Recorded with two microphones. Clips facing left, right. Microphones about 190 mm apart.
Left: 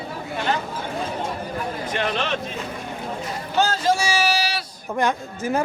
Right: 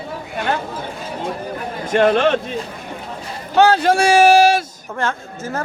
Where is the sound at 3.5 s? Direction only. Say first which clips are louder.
Right 7 dB; 60° right (ahead or behind).